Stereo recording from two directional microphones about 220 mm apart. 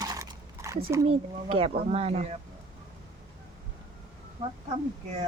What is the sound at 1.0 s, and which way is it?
A child's voice, 25° right (ahead or behind).